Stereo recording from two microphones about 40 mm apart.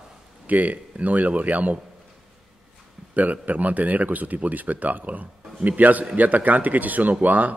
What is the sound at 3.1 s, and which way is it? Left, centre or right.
Speech, right.